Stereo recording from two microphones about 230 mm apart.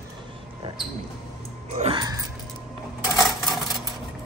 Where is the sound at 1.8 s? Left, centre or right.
Right.